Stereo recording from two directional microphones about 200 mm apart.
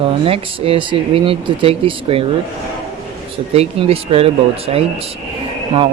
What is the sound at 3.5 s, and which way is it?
Speech, 30° right (ahead or behind).